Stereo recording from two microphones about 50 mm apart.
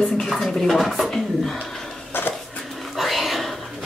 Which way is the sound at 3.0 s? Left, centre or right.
Centre.